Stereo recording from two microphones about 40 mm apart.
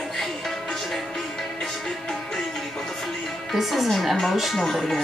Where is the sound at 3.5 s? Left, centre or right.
Centre.